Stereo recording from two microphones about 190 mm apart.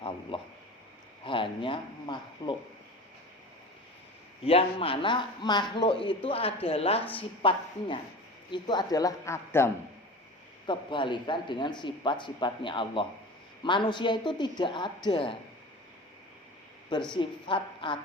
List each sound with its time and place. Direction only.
0.0 s a sound: 25° left (ahead or behind)
1.2 s speech: 25° left (ahead or behind)
4.4 s speech: 30° left (ahead or behind); by 9.6 s 15° left (ahead or behind)
10.7 s speech: 25° left (ahead or behind)
17.2 s speech: 25° left (ahead or behind)